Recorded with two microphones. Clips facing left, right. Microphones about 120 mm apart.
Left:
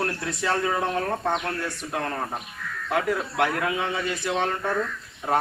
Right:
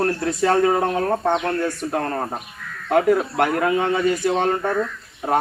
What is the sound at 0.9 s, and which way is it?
Speech, 30° right (ahead or behind).